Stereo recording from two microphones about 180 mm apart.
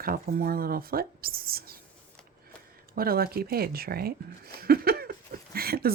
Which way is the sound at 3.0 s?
55° right (ahead or behind).